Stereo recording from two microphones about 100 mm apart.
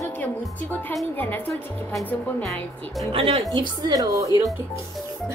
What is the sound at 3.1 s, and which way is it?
Speech, 65° right (ahead or behind).